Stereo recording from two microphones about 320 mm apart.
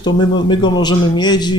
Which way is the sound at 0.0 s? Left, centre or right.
Centre.